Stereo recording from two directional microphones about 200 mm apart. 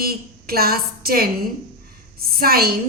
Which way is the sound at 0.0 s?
50° right (ahead or behind).